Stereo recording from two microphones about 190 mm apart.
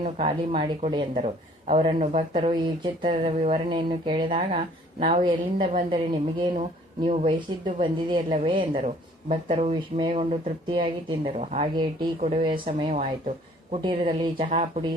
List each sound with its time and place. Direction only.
0.0 s speech: 35° right (ahead or behind)
1.1 s speech: 35° right (ahead or behind)
2.5 s a woman's voice: 25° right (ahead or behind)
7.0 s a woman's voice: 30° right (ahead or behind)
12.9 s a woman's voice: 40° right (ahead or behind)